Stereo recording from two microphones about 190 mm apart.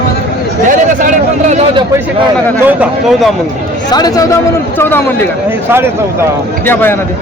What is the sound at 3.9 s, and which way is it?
A man's voice, 20° left (ahead or behind).